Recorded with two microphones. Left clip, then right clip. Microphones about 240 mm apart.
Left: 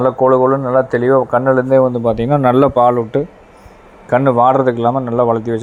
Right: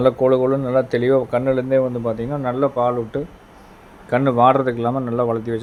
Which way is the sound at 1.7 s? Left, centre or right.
Left.